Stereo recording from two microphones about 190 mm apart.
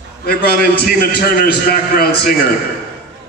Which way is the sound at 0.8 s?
55° left (ahead or behind).